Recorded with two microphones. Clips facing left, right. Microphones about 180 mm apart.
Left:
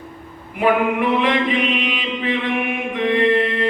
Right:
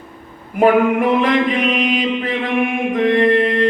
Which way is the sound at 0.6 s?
45° right (ahead or behind).